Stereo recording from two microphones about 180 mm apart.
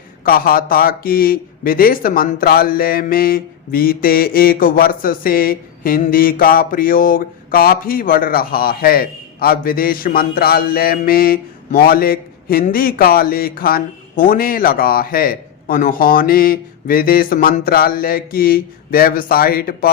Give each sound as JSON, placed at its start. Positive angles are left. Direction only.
{"t": 0.3, "sound": "speech", "side_deg": 55}